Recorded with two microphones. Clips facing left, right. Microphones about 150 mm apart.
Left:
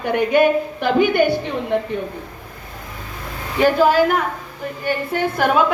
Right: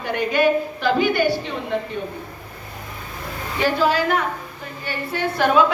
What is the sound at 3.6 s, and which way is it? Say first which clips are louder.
A woman's voice: left 5 dB; 50° left (ahead or behind).